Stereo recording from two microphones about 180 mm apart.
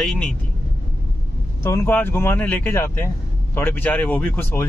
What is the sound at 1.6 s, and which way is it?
Speech, 15° left (ahead or behind).